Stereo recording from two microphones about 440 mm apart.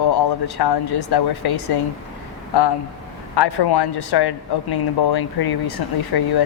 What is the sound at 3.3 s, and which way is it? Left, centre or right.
Speech, left.